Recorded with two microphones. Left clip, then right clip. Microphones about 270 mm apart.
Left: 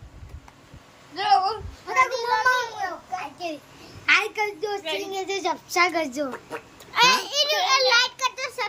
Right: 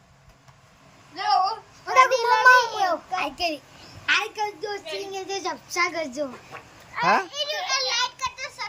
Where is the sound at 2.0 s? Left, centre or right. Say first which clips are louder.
Right 5 dB; right.